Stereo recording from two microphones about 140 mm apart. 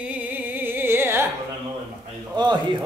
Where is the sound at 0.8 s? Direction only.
15° right (ahead or behind).